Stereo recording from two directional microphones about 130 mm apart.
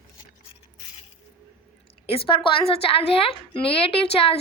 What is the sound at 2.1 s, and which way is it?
A woman's voice, 45° left (ahead or behind).